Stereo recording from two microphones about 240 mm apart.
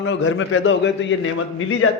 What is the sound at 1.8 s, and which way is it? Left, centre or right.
Speech, left.